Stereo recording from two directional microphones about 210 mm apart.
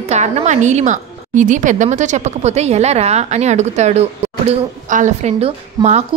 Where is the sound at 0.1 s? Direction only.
35° right (ahead or behind).